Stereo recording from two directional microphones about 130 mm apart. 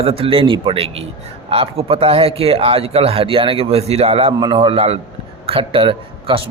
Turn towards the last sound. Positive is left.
turn(degrees=-40)  # may be behind; listen again after turning